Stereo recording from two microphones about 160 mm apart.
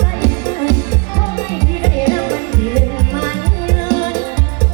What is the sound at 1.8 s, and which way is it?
Music, 25° left (ahead or behind).